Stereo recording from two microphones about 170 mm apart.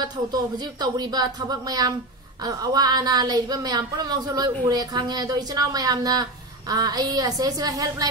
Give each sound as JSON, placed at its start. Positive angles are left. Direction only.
{"t": 0.0, "sound": "a woman's voice", "side_deg": -25}